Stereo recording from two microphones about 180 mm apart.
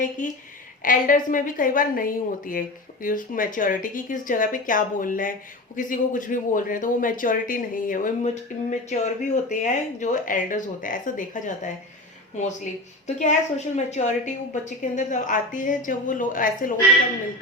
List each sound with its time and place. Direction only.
0.2 s a woman's voice: 45° left (ahead or behind)
13.1 s a woman's voice: 40° left (ahead or behind)